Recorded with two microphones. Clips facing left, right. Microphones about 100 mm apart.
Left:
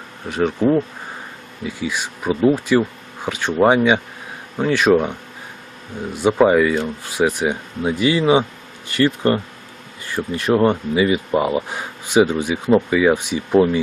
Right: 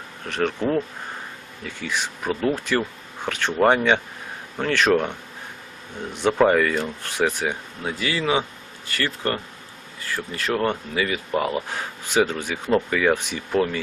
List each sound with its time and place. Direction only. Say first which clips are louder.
0.3 s speech: left 6 dB; 10° left (ahead or behind)
6.1 s speech: left 4 dB; 10° left (ahead or behind)